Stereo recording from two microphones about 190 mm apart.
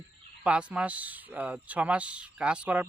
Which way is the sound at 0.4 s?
5° right (ahead or behind).